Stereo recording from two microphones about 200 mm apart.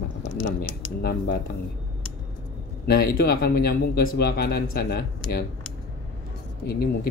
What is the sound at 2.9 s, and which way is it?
Speech, 50° left (ahead or behind).